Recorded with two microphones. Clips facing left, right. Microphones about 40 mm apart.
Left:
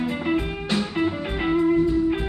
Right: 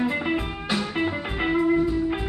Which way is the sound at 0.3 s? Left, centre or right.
Centre.